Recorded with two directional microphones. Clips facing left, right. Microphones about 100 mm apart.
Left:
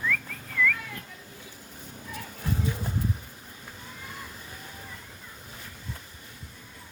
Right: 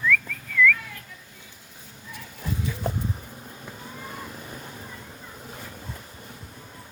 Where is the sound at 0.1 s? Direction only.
35° left (ahead or behind).